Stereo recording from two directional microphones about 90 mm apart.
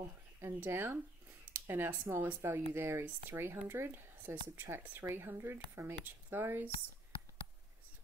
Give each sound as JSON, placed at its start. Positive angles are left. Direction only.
{"t": 0.4, "sound": "speech", "side_deg": -30}